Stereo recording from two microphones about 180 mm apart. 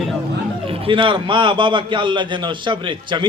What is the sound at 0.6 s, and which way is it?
A man's voice, 30° right (ahead or behind).